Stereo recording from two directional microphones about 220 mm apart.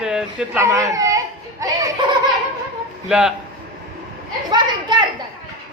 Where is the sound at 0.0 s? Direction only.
5° right (ahead or behind).